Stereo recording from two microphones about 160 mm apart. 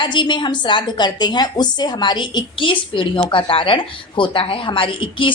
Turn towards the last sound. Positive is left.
turn(degrees=30)  # may be behind; listen again after turning